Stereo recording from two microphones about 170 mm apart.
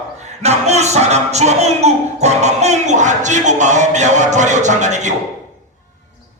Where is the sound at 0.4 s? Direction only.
40° right (ahead or behind).